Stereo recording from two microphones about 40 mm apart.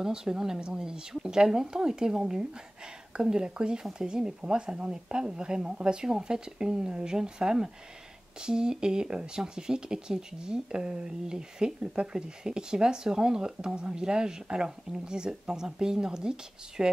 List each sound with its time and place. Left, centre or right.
0.0 s speech: centre